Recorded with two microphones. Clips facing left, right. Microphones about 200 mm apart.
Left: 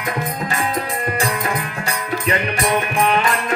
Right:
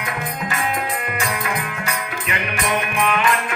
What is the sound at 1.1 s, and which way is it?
Music, 35° left (ahead or behind).